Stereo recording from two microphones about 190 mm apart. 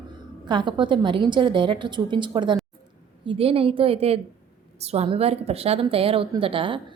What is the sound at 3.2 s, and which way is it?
Speech, 30° right (ahead or behind).